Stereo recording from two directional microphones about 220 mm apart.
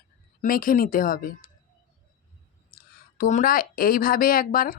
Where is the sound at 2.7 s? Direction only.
40° left (ahead or behind).